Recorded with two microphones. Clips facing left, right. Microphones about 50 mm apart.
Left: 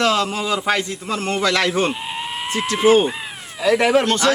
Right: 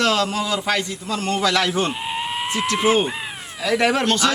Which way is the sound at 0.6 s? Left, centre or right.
Left.